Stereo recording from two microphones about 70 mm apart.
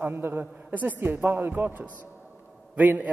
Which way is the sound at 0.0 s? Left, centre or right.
Right.